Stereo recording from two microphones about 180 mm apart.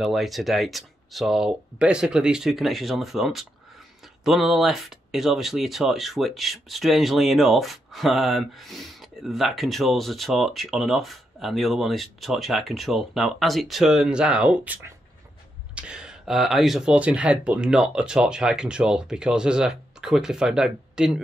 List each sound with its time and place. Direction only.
0.0 s speech: centre (ahead or behind)